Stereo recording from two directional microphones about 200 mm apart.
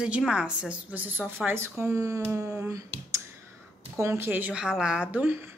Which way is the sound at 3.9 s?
15° right (ahead or behind).